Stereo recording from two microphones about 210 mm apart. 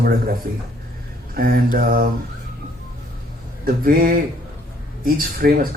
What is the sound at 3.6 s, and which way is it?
Speech, 45° right (ahead or behind).